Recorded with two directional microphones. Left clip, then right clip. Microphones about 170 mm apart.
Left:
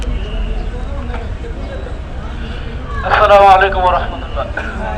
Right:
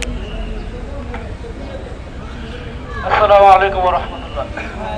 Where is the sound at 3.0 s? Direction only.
10° right (ahead or behind).